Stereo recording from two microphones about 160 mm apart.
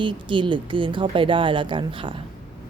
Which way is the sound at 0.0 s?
30° right (ahead or behind).